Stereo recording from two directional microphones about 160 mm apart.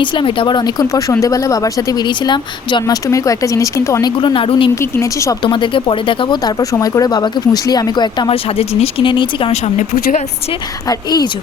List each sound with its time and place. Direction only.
0.0 s speech: 30° left (ahead or behind)
4.2 s speech: 30° left (ahead or behind)
4.7 s speech: 15° left (ahead or behind)
5.4 s speech: 30° left (ahead or behind)
9.7 s speech: 60° left (ahead or behind)
10.8 s speech: 25° left (ahead or behind)